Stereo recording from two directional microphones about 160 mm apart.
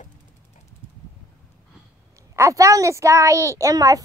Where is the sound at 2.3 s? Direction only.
20° right (ahead or behind).